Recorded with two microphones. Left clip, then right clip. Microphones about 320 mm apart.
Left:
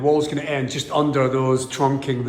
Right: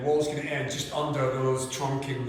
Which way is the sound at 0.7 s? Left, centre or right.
Centre.